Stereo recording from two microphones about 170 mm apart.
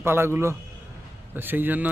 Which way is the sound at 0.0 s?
15° right (ahead or behind).